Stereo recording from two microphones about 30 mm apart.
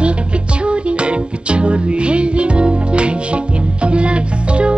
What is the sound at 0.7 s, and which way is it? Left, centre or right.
Music, right.